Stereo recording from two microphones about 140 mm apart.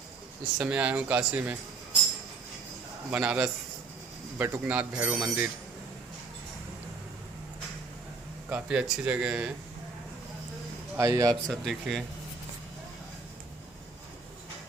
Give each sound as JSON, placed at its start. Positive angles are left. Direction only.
{"t": 0.6, "sound": "speech", "side_deg": -10}
{"t": 3.1, "sound": "speech", "side_deg": -10}
{"t": 8.4, "sound": "speech", "side_deg": -10}
{"t": 10.9, "sound": "a man's voice", "side_deg": -20}
{"t": 11.4, "sound": "speech", "side_deg": 0}